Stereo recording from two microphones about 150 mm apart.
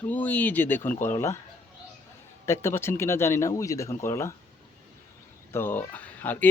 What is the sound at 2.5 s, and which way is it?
Speech, 15° left (ahead or behind).